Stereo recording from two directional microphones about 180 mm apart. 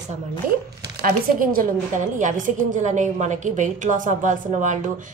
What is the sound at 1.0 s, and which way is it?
A woman's voice, 50° right (ahead or behind).